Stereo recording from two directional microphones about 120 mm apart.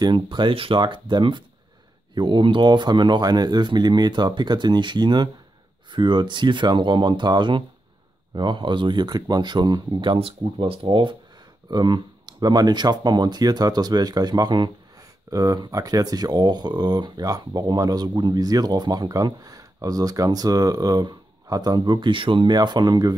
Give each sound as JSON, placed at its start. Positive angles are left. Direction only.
{"t": 0.0, "sound": "speech", "side_deg": -40}
{"t": 10.1, "sound": "speech", "side_deg": -50}